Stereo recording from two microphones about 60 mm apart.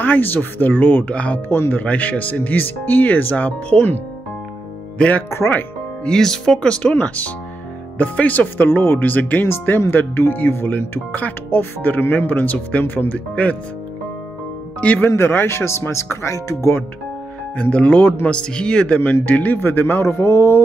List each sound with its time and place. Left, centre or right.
0.0 s speech: left
1.5 s speech: left
4.9 s speech: centre
6.7 s speech: left
15.0 s speech: left
17.6 s speech: left
19.2 s speech: left